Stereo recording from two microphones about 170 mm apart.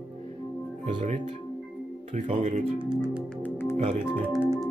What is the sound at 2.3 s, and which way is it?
Speech, 40° right (ahead or behind).